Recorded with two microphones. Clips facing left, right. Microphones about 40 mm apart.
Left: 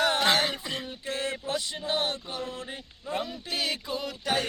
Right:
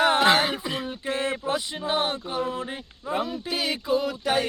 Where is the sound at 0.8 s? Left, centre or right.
Right.